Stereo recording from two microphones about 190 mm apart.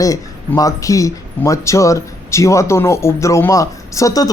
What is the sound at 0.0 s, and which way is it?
Speech, 15° left (ahead or behind).